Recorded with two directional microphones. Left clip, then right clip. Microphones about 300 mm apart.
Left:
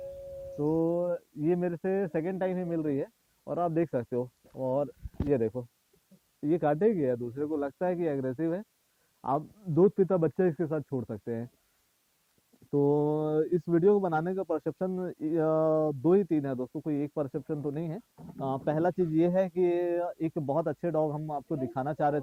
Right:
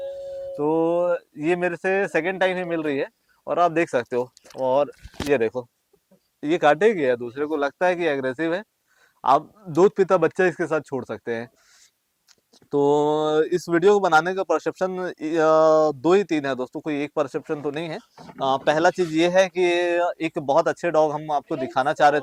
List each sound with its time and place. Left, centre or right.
0.8 s speech: centre
9.4 s speech: centre
12.7 s speech: right
13.2 s speech: centre
16.6 s speech: right
16.8 s speech: centre